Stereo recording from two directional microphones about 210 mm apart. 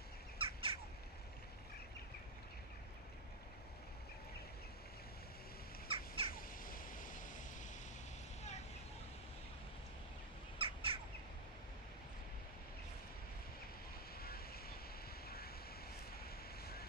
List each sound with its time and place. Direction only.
0.4 s crow: 25° right (ahead or behind)
5.9 s bird: 25° right (ahead or behind)
6.3 s a sound: 40° left (ahead or behind)
10.6 s bird: 25° right (ahead or behind)
14.1 s waves: 45° left (ahead or behind)
15.2 s vehicle: 45° left (ahead or behind)